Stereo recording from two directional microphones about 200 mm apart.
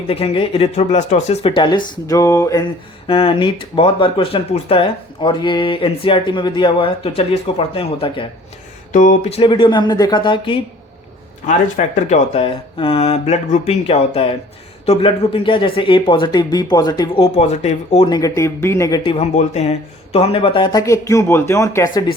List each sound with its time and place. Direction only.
0.1 s speech: 30° left (ahead or behind)
3.1 s speech: 25° left (ahead or behind)
8.9 s speech: 40° left (ahead or behind)
11.4 s speech: 35° left (ahead or behind); by 17.2 s 20° left (ahead or behind)
17.3 s speech: 35° left (ahead or behind); by 22.1 s 15° left (ahead or behind)